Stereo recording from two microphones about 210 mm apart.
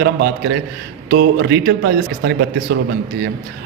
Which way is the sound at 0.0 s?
50° right (ahead or behind).